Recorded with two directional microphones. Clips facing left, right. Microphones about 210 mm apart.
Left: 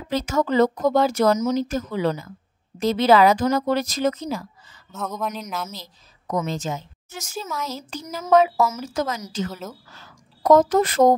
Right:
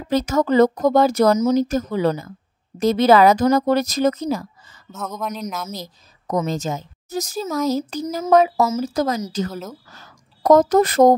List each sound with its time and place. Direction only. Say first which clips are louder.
0.1 s a woman's voice: right 4 dB; 40° right (ahead or behind)
4.9 s speech: even; centre (ahead or behind)
5.7 s a woman's voice: right 7 dB; 40° right (ahead or behind)